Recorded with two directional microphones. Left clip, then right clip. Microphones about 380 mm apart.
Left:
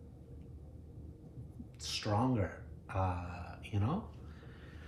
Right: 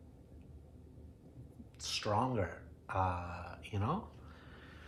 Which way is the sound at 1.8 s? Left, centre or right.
Centre.